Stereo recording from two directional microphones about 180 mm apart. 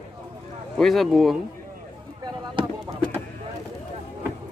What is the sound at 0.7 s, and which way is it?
Speech, centre (ahead or behind).